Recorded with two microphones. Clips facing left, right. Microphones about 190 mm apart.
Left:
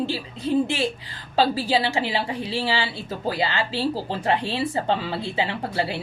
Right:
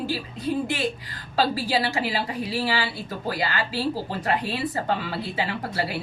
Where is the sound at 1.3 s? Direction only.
25° left (ahead or behind).